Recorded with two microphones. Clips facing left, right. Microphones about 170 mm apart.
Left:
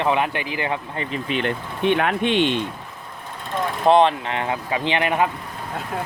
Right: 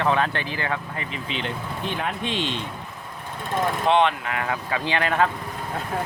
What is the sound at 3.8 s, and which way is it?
Speech, 35° left (ahead or behind).